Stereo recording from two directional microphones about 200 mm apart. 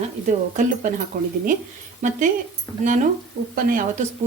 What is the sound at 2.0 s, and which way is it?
Speech, 40° right (ahead or behind).